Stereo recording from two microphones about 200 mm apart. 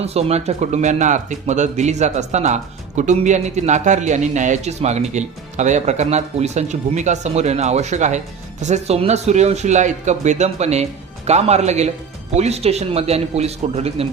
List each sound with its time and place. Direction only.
0.0 s speech: 30° right (ahead or behind)